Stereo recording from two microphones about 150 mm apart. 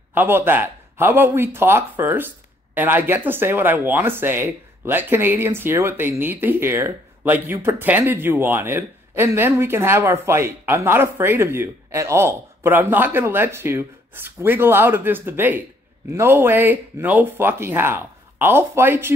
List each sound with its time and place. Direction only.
0.1 s speech: 15° right (ahead or behind)